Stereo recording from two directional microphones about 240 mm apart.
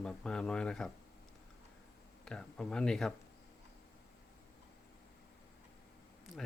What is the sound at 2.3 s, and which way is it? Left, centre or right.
Speech, centre.